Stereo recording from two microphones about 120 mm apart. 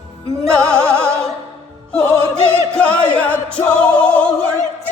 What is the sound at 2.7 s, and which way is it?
Music, 10° left (ahead or behind).